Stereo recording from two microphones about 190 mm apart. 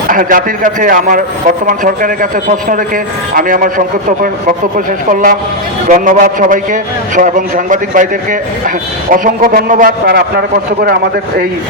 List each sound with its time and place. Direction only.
0.1 s a man's voice: 45° right (ahead or behind)